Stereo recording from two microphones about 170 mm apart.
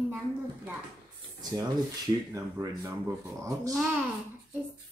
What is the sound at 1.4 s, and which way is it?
Speech, 25° right (ahead or behind).